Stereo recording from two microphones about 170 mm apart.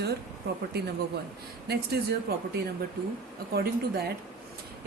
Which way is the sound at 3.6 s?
65° right (ahead or behind).